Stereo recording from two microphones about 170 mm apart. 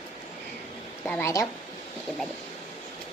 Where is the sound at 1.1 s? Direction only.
15° left (ahead or behind).